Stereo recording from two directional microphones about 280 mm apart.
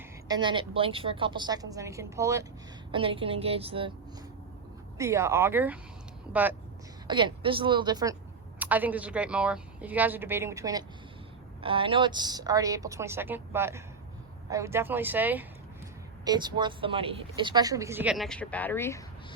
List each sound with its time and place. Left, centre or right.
0.3 s a woman's voice: centre
4.9 s speech: centre
7.1 s speech: centre